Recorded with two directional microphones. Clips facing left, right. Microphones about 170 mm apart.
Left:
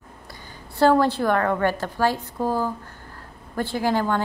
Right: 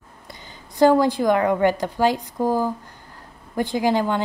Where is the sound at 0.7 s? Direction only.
15° right (ahead or behind).